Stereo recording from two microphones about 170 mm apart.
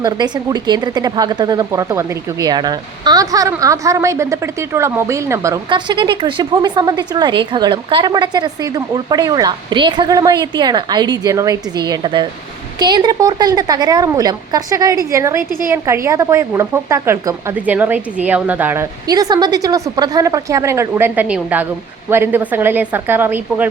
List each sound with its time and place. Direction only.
0.0 s a woman's voice: 25° right (ahead or behind)
5.6 s a woman's voice: 25° right (ahead or behind); by 23.6 s 10° right (ahead or behind)